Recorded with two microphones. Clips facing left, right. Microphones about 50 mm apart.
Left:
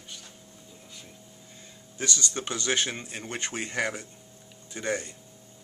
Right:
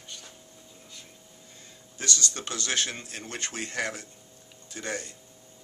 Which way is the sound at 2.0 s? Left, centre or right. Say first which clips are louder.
Left 1 dB; centre.